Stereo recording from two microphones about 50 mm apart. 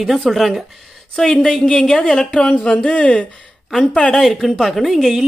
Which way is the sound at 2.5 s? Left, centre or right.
Left.